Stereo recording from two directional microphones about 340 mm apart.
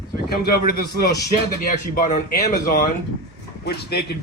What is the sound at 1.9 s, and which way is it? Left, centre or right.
Speech, left.